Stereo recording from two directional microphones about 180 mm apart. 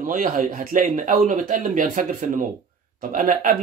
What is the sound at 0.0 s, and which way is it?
Speech, 50° right (ahead or behind).